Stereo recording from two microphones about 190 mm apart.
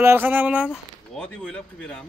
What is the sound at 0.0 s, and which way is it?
Speech, 10° right (ahead or behind).